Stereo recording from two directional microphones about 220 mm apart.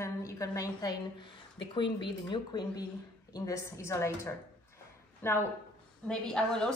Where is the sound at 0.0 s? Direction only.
15° left (ahead or behind).